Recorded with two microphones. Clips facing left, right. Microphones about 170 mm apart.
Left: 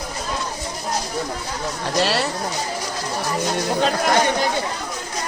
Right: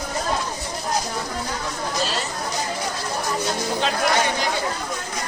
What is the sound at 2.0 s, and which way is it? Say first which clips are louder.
Speech: left 7 dB; 70° left (ahead or behind).